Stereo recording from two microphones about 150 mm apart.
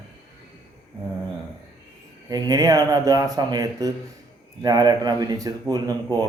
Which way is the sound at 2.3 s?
25° right (ahead or behind).